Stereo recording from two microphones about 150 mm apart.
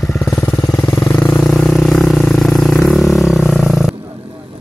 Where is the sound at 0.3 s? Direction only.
5° left (ahead or behind).